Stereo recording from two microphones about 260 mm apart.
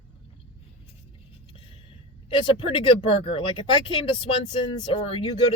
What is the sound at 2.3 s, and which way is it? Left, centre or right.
Speech, centre.